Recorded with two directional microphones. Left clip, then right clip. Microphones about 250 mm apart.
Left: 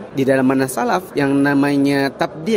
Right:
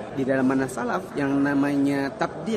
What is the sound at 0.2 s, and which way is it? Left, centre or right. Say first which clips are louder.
A man's voice: left 8 dB; left.